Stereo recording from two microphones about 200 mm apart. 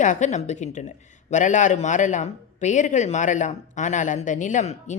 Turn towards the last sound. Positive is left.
turn(degrees=35)  # may be behind; listen again after turning